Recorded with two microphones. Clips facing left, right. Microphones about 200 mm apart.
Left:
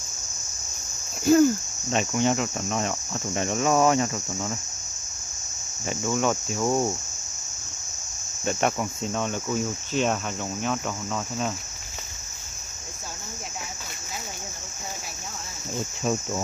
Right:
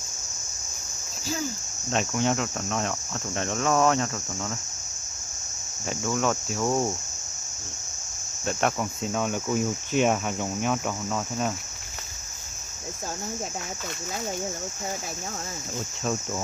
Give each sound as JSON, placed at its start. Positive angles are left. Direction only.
{"t": 1.2, "sound": "cricket", "side_deg": 55}
{"t": 1.9, "sound": "cricket", "side_deg": 0}
{"t": 5.9, "sound": "cricket", "side_deg": 5}
{"t": 8.5, "sound": "cricket", "side_deg": 5}